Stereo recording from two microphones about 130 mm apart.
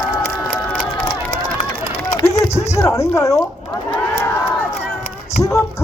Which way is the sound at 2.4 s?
55° left (ahead or behind).